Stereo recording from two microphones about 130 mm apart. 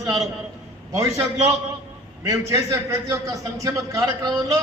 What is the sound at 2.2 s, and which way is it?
A man's voice, 25° right (ahead or behind).